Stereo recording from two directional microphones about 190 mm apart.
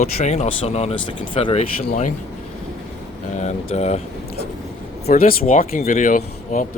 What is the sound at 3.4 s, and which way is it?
Speech, 35° left (ahead or behind).